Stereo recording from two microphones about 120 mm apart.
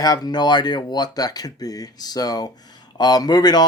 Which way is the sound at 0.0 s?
30° left (ahead or behind).